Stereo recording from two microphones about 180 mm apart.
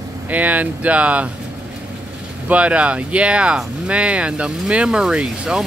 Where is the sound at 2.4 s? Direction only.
5° right (ahead or behind).